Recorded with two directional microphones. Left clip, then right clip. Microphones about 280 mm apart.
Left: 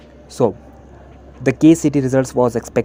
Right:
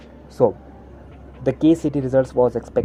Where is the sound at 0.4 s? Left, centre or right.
Left.